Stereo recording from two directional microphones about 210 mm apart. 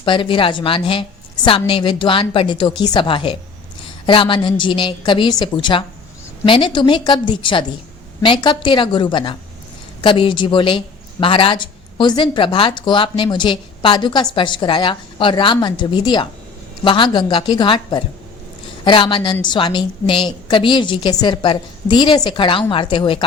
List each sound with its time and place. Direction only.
0.0 s speech: 25° left (ahead or behind)